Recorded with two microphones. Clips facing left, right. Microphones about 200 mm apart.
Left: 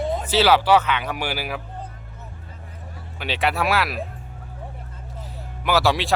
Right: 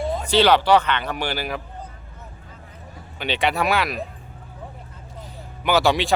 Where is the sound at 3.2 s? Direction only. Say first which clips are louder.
Right 1 dB; centre (ahead or behind).